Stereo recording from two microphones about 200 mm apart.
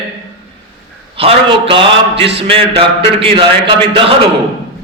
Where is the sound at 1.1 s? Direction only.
25° right (ahead or behind).